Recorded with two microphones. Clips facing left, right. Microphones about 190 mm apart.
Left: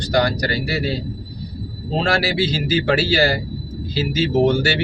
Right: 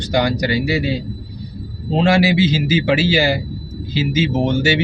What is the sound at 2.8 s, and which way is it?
Speech, 15° right (ahead or behind).